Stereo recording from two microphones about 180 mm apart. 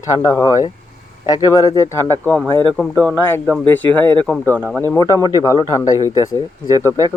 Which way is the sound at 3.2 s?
10° left (ahead or behind).